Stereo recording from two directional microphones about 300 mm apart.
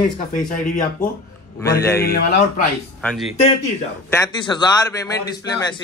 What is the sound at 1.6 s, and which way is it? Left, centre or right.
Speech, centre.